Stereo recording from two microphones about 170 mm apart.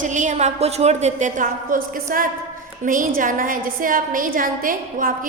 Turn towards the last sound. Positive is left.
turn(degrees=-55)  # may be behind; listen again after turning